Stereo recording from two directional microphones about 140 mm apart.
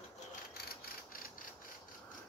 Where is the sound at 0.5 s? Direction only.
90° left.